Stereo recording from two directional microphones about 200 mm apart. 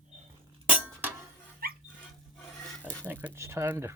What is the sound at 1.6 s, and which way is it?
Dog, 50° right (ahead or behind).